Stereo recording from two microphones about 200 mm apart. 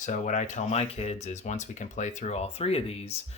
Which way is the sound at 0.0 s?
40° left (ahead or behind).